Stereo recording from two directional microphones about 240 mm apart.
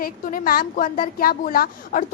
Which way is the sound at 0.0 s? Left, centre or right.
Left.